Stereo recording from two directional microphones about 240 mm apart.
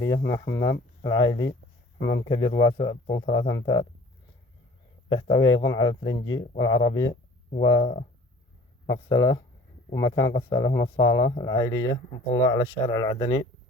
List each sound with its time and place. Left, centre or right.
0.0 s speech: centre
5.0 s speech: centre